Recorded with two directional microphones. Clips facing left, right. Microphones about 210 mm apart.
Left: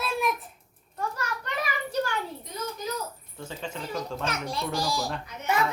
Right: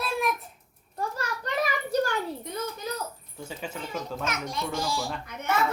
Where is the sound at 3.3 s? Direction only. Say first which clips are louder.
Even; 5° right (ahead or behind).